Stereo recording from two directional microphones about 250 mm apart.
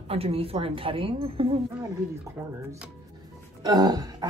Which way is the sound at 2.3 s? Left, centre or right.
Centre.